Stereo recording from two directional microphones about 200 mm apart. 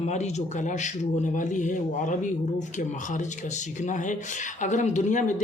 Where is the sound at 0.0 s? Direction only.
35° left (ahead or behind).